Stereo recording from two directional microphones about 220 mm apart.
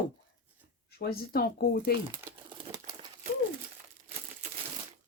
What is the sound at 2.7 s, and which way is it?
Crumpling, 15° right (ahead or behind).